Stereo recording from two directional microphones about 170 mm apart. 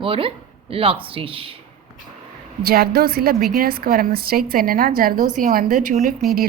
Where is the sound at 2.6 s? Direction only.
65° right (ahead or behind).